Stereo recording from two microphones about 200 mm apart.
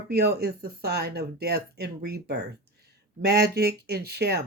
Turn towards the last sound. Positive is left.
turn(degrees=-55)  # may be behind; listen again after turning